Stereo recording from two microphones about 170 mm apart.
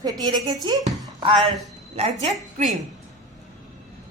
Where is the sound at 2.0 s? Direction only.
40° right (ahead or behind).